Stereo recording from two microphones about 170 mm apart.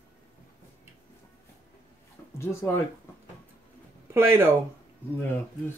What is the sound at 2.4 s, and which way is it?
Speech, 15° left (ahead or behind).